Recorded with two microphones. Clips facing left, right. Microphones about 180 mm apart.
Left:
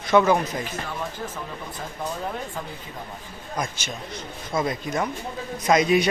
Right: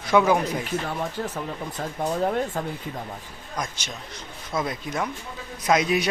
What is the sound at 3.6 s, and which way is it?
Speech, 5° left (ahead or behind).